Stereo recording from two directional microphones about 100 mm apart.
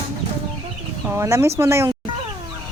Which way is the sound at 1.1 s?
25° right (ahead or behind).